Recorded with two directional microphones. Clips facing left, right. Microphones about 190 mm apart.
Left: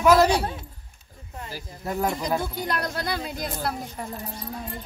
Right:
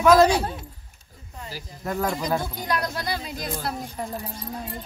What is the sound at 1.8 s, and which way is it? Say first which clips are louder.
Speech: even; 20° left (ahead or behind).